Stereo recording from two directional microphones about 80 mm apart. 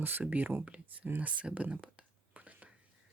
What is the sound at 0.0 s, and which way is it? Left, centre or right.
Speech, right.